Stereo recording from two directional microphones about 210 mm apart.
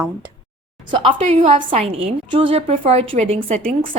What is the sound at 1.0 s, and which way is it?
A woman's voice, 30° right (ahead or behind).